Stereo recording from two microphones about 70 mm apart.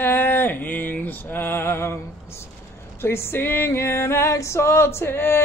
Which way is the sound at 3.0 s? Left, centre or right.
Left.